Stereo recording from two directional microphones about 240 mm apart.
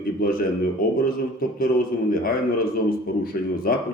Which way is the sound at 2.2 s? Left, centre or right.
Left.